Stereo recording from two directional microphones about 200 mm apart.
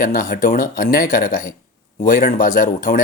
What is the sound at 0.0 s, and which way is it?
Speech, 45° left (ahead or behind).